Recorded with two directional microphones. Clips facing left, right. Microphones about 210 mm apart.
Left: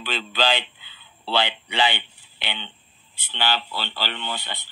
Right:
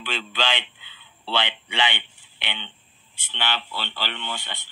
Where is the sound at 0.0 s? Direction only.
35° left (ahead or behind).